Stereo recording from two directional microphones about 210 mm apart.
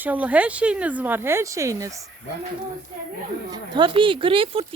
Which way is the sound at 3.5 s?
20° right (ahead or behind).